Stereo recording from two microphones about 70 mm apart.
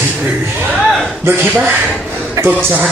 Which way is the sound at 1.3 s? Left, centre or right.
Right.